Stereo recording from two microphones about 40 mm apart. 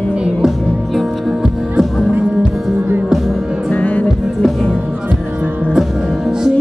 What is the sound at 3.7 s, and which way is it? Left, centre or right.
Music, left.